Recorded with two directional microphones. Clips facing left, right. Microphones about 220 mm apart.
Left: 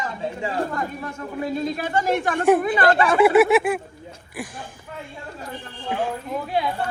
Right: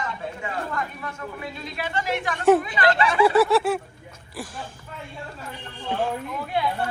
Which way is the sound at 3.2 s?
20° left (ahead or behind).